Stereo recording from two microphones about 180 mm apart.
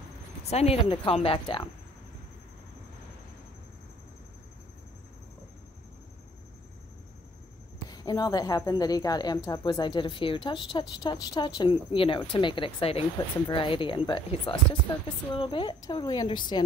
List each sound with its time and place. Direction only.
0.4 s speech: 35° left (ahead or behind)
7.9 s speech: 20° left (ahead or behind)